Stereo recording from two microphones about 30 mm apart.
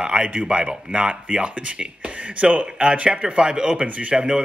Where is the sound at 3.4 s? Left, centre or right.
Right.